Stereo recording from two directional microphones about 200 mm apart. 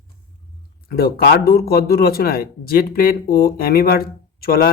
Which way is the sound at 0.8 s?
50° left (ahead or behind).